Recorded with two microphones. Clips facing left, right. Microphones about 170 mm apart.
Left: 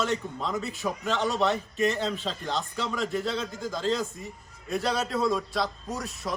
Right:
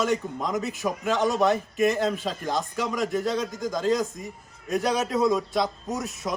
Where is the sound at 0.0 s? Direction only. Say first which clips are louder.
Right 3 dB; 15° right (ahead or behind).